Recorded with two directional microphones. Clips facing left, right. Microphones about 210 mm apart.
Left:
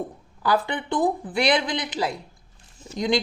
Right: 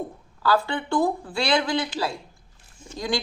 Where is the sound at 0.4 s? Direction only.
20° left (ahead or behind).